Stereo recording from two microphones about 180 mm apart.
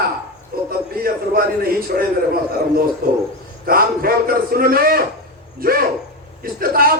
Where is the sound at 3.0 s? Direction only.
60° right (ahead or behind).